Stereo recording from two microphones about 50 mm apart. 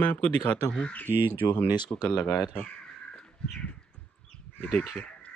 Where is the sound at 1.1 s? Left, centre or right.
Right.